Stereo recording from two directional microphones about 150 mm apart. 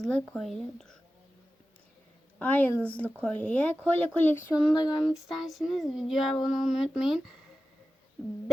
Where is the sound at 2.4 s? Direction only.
10° left (ahead or behind).